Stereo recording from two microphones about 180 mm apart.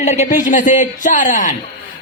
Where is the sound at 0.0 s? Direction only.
40° left (ahead or behind).